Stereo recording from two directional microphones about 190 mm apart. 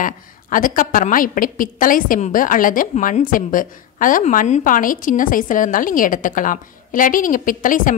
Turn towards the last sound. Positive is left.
turn(degrees=45)  # may be behind; listen again after turning